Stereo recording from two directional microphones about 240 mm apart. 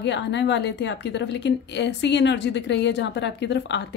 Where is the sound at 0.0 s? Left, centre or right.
Left.